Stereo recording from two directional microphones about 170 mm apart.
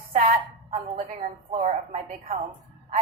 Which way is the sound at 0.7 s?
35° right (ahead or behind).